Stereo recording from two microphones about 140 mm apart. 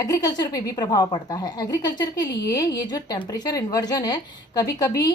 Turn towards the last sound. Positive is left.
turn(degrees=25)  # may be behind; listen again after turning